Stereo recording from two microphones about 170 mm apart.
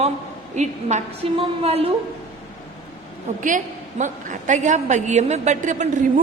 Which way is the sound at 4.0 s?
45° right (ahead or behind).